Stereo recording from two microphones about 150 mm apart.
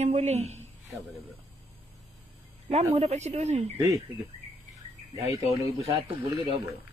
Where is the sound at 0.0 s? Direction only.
50° right (ahead or behind).